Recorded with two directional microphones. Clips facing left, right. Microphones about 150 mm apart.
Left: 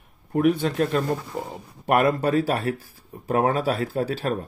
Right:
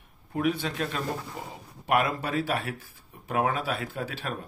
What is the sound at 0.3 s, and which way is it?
Speech, 45° left (ahead or behind).